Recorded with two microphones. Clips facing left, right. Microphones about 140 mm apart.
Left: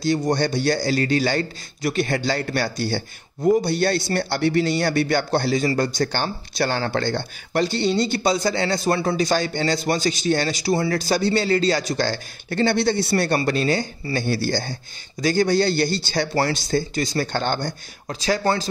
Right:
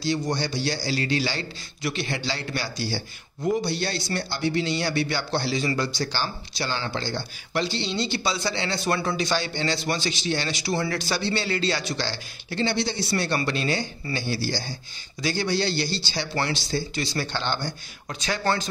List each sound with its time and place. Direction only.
0.0 s a man's voice: 50° left (ahead or behind)
13.4 s speech: 40° left (ahead or behind)
14.1 s a man's voice: 55° left (ahead or behind)
18.0 s speech: 35° left (ahead or behind)